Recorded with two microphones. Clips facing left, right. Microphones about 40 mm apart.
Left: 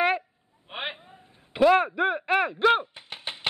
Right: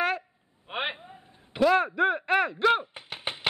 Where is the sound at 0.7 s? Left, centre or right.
Centre.